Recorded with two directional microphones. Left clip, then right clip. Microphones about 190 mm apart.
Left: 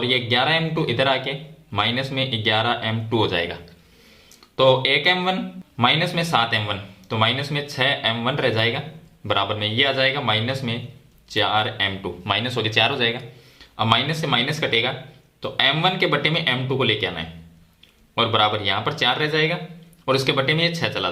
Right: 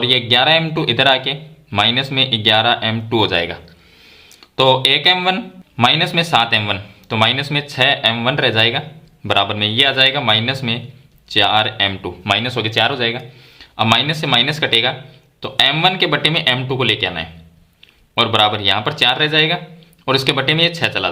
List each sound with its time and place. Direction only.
0.0 s speech: 30° right (ahead or behind)